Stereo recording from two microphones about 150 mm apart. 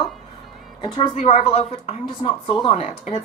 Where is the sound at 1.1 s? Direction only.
45° left (ahead or behind).